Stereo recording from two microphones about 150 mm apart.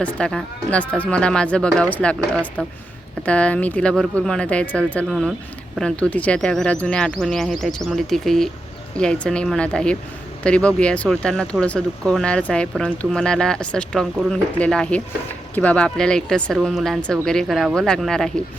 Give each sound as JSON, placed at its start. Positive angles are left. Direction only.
{"t": 0.0, "sound": "speech", "side_deg": 5}